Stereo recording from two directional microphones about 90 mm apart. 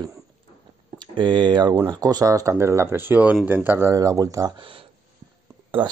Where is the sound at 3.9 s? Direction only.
40° right (ahead or behind).